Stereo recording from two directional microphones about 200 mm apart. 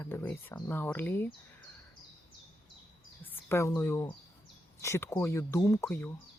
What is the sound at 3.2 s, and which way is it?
Speech, 10° left (ahead or behind).